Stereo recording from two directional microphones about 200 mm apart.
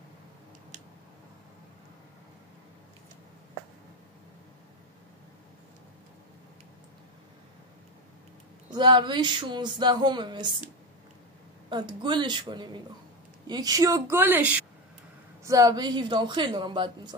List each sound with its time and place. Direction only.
8.6 s speech: 20° right (ahead or behind)
11.7 s a woman's voice: 20° right (ahead or behind)